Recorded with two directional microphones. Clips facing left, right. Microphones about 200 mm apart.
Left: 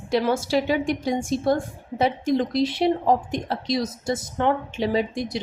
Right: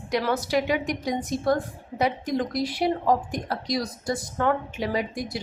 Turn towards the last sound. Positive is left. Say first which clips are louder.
# left 4 dB
turn(degrees=25)  # may be behind; listen again after turning